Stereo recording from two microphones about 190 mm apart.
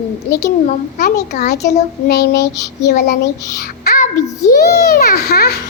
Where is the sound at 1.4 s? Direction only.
40° left (ahead or behind).